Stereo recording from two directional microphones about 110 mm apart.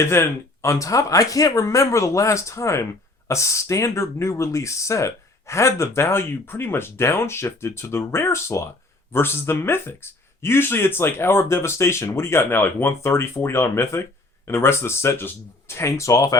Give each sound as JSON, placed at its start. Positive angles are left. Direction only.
{"t": 0.0, "sound": "speech", "side_deg": 25}